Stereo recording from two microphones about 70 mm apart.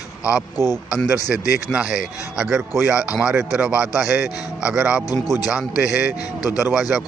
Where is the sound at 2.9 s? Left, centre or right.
Centre.